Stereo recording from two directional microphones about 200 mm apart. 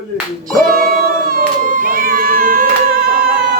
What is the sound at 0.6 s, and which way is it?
Cat, 45° right (ahead or behind).